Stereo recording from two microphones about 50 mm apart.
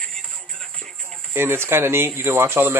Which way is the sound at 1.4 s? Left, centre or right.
Right.